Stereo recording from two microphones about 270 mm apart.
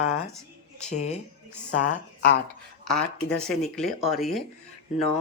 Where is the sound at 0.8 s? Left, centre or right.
Left.